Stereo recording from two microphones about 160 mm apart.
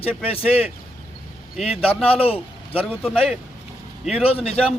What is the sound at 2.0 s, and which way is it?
Speech, 35° left (ahead or behind).